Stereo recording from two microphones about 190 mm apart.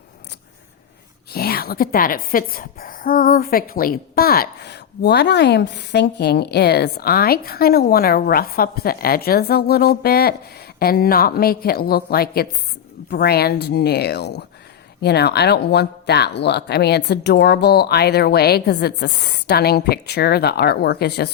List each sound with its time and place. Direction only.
1.3 s a woman's voice: 55° left (ahead or behind)